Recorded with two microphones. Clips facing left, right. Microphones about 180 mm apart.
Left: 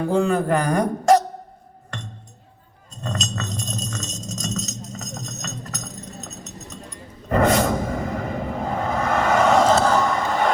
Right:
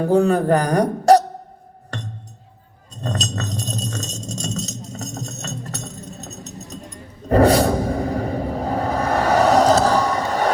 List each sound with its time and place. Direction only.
0.0 s speech: 40° right (ahead or behind)
1.9 s music: 35° right (ahead or behind)
2.9 s jingle bell: 35° right (ahead or behind)
7.3 s a sound: 35° right (ahead or behind)